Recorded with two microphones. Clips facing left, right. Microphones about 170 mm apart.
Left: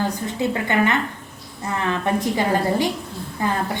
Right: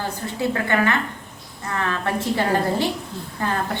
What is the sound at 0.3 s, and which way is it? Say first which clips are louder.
A woman's voice: even; 20° left (ahead or behind).